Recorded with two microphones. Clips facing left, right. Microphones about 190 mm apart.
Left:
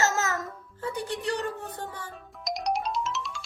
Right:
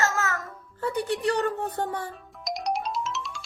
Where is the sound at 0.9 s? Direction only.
65° right (ahead or behind).